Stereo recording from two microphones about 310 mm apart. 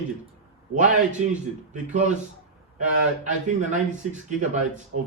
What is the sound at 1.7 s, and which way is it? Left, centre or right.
Speech, right.